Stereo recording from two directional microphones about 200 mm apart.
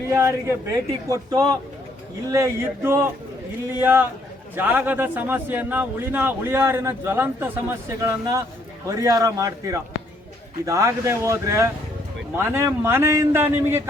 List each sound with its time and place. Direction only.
0.1 s a man's voice: 15° right (ahead or behind)